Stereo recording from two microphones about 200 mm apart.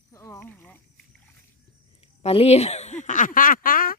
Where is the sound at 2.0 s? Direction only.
30° left (ahead or behind); by 4.0 s 45° left (ahead or behind).